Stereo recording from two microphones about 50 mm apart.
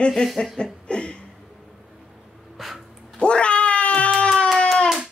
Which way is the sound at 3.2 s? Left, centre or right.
Left.